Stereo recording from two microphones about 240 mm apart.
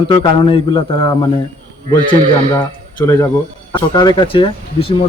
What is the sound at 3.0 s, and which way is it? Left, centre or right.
Speech, centre.